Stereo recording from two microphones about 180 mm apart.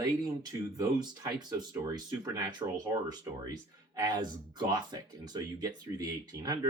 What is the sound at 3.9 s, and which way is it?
Speech, 20° right (ahead or behind).